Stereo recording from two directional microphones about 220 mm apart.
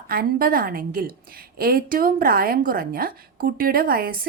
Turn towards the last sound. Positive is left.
turn(degrees=-40)  # may be behind; listen again after turning